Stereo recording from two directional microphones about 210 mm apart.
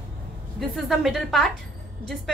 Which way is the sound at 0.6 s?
Centre (ahead or behind).